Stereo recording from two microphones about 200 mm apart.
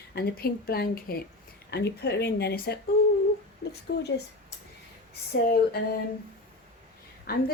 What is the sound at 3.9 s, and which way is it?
Speech, 60° left (ahead or behind).